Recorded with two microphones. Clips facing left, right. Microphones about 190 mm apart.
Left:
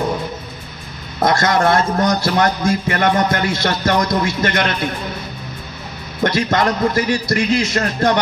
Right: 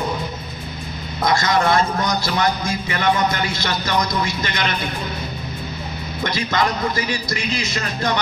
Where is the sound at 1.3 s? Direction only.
55° left (ahead or behind).